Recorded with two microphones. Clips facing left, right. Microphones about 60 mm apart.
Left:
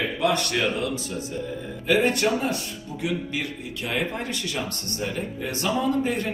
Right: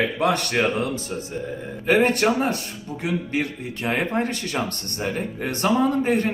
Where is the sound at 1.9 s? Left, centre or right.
Right.